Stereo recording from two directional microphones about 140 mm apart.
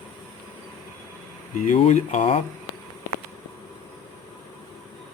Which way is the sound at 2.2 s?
40° left (ahead or behind).